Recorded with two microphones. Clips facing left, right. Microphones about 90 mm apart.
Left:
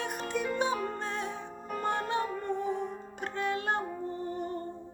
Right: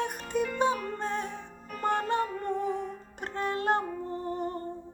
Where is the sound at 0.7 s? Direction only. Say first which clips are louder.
Right 2 dB; 20° left (ahead or behind).